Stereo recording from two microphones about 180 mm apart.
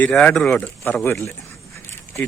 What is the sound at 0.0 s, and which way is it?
A man's voice, 5° left (ahead or behind).